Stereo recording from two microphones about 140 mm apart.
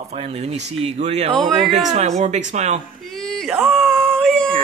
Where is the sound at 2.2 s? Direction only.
55° right (ahead or behind).